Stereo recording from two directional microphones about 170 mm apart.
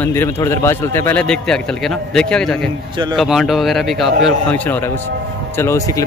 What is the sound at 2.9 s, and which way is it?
Speech, 25° right (ahead or behind).